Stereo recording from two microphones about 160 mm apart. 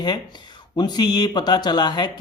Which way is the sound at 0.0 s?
30° left (ahead or behind).